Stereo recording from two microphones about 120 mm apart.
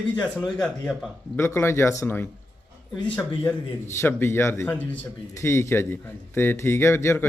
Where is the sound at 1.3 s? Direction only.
20° left (ahead or behind).